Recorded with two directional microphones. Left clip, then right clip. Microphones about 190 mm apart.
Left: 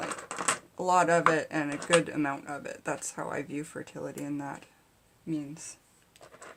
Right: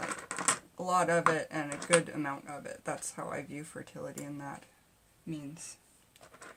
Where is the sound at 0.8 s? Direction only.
35° left (ahead or behind).